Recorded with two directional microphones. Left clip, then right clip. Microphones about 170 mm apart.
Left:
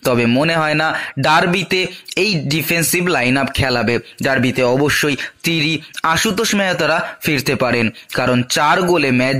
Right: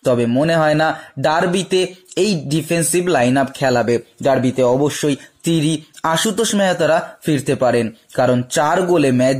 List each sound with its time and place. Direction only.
0.0 s speech: 15° left (ahead or behind)